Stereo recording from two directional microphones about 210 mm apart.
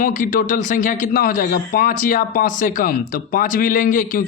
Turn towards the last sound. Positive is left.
turn(degrees=40)  # may be behind; listen again after turning